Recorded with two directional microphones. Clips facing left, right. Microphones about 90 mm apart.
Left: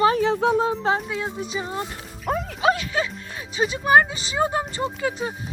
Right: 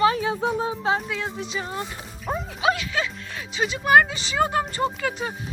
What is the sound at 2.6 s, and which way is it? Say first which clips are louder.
Speech: left 1 dB; 40° left (ahead or behind).